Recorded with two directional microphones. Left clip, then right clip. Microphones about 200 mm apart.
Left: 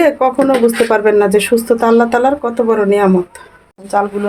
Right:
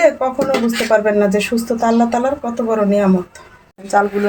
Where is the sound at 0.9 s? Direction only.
45° left (ahead or behind).